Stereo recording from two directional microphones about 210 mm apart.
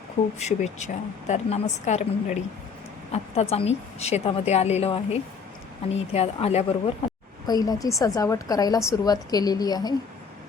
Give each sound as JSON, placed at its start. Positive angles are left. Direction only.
{"t": 0.3, "sound": "a woman's voice", "side_deg": 35}
{"t": 7.4, "sound": "a woman's voice", "side_deg": 20}